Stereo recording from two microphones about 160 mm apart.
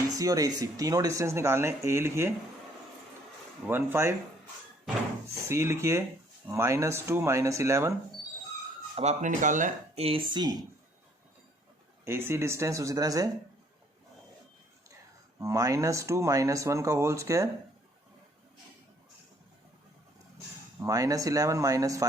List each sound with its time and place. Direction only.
0.1 s speech: 20° right (ahead or behind)
3.7 s speech: 15° right (ahead or behind)
5.5 s speech: 15° right (ahead or behind)
9.0 s speech: 45° right (ahead or behind); by 10.6 s 25° right (ahead or behind)
12.0 s speech: 15° right (ahead or behind)
15.4 s speech: 20° right (ahead or behind)
20.8 s speech: 20° right (ahead or behind)